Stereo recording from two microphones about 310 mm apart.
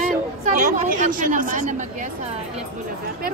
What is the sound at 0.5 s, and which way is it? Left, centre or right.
A woman's voice, right.